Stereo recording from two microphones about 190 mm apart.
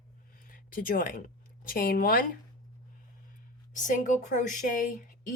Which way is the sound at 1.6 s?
50° left (ahead or behind).